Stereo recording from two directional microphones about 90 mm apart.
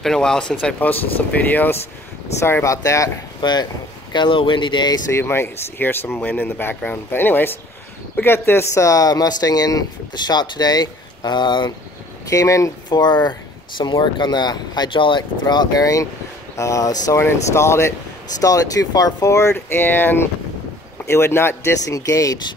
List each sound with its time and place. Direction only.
0.0 s speech: 5° left (ahead or behind)
2.4 s speech: 30° left (ahead or behind)
3.3 s speech: 55° left (ahead or behind)
5.1 s speech: 25° left (ahead or behind); by 11.7 s 60° left (ahead or behind)
12.3 s speech: 35° left (ahead or behind)
12.9 s speech: 50° left (ahead or behind)
15.4 s speech: 50° left (ahead or behind)
19.5 s speech: 25° left (ahead or behind)
21.8 s speech: 40° left (ahead or behind)